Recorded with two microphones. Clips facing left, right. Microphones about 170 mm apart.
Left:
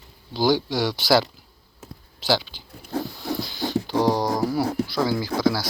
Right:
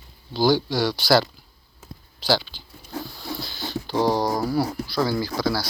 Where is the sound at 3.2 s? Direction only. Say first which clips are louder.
Left 5 dB; 20° left (ahead or behind).